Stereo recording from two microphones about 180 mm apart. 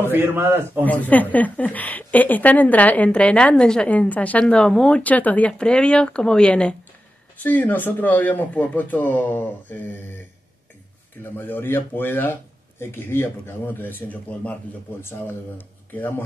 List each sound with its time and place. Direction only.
0.1 s a man's voice: 10° right (ahead or behind)
0.8 s a woman's voice: 10° left (ahead or behind)
11.3 s a woman's voice: 10° left (ahead or behind)